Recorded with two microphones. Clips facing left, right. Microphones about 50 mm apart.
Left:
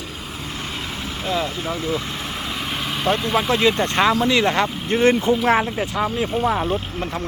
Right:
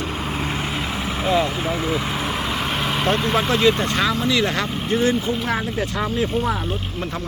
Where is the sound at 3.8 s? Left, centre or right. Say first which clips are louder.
Left 3 dB; left.